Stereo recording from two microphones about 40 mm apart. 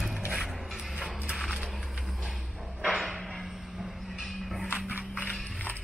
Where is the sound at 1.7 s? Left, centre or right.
Centre.